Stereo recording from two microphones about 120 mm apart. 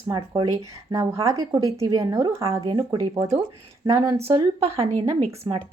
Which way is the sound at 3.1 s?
25° right (ahead or behind).